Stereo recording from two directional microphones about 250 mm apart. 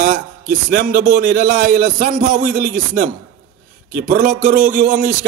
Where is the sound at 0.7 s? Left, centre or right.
Right.